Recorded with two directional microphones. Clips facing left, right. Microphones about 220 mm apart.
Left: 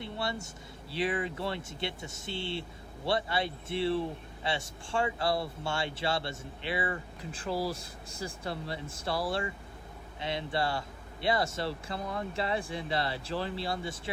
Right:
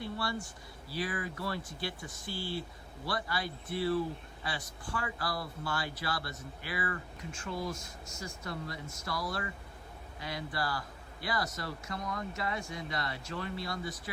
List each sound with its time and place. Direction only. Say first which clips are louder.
0.0 s vehicle: left 1 dB; 25° left (ahead or behind)
0.9 s speech: left 5 dB; 25° left (ahead or behind)